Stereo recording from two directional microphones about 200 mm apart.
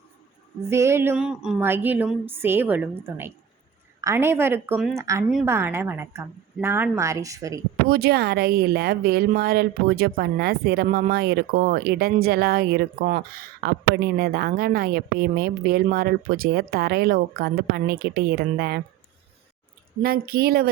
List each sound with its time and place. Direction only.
0.7 s a woman's voice: 15° right (ahead or behind)
7.9 s a woman's voice: 50° right (ahead or behind)
20.0 s a woman's voice: 50° right (ahead or behind)